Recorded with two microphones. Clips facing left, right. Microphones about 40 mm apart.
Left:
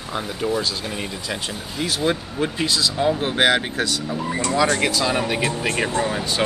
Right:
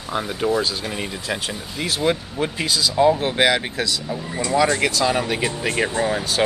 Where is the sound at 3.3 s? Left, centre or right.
Left.